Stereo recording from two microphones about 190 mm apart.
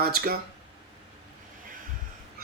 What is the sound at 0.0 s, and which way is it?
Speech, 50° right (ahead or behind).